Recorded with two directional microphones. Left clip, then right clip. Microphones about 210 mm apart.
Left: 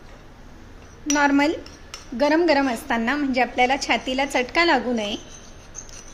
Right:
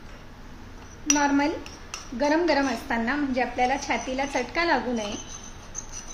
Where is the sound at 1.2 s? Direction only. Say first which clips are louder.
Left 7 dB; 45° left (ahead or behind).